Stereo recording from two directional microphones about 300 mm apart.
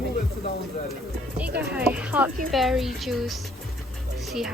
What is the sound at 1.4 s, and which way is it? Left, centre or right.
Speech, centre.